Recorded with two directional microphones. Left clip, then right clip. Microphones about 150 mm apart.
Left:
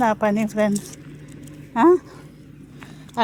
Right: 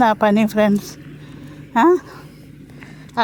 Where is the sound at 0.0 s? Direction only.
20° right (ahead or behind).